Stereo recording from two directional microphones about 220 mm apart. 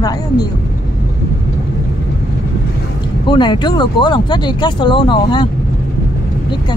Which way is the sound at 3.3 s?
20° left (ahead or behind).